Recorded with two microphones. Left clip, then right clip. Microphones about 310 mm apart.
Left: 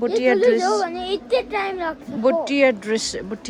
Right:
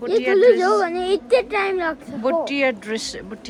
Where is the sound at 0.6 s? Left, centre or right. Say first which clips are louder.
Right 2 dB; right.